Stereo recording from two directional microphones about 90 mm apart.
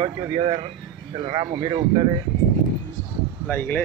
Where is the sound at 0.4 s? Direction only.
80° right.